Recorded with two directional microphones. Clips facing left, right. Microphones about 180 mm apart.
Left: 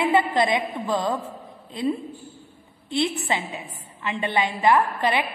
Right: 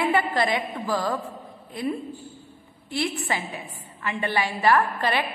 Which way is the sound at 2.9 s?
20° left (ahead or behind).